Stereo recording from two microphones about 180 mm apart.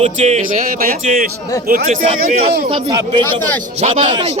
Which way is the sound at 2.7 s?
25° right (ahead or behind).